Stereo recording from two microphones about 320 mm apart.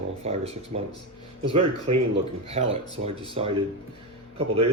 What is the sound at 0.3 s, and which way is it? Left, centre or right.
Speech, centre.